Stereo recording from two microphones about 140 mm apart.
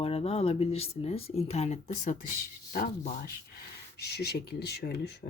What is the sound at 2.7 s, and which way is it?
Speech, 90° left.